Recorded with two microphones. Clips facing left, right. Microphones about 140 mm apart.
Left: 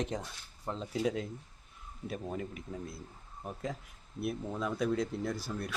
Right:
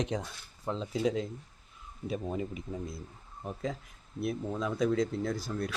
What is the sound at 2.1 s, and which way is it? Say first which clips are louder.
Speech: right 4 dB; 10° right (ahead or behind).